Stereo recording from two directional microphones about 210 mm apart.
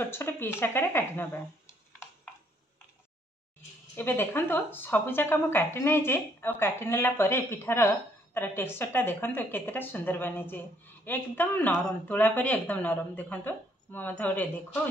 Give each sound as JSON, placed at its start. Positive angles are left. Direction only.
{"t": 0.0, "sound": "a woman's voice", "side_deg": 10}
{"t": 3.9, "sound": "a woman's voice", "side_deg": 10}